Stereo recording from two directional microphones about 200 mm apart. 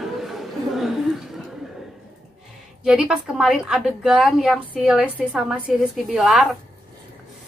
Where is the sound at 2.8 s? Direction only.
5° right (ahead or behind).